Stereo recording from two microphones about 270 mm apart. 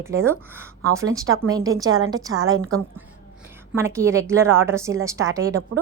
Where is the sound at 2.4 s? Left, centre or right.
Right.